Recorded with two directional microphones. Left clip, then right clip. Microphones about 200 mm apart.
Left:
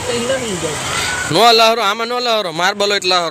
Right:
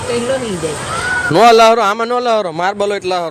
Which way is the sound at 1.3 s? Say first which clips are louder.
Right 3 dB; 20° right (ahead or behind).